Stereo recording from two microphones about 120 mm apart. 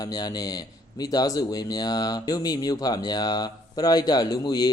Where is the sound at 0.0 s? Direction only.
30° left (ahead or behind).